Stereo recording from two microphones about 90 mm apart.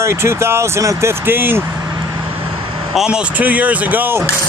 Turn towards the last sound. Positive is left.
turn(degrees=-20)  # may be behind; listen again after turning